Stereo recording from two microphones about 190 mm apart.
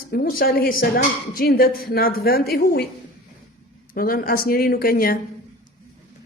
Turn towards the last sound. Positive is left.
turn(degrees=50)  # may be behind; listen again after turning